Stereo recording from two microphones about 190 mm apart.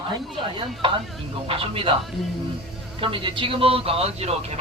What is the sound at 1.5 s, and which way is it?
Speech, 30° right (ahead or behind).